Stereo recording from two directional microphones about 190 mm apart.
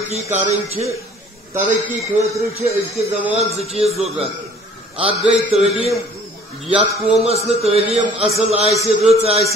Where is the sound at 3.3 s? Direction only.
35° right (ahead or behind).